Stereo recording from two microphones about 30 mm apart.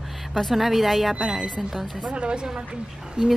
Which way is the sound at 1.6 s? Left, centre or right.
Centre.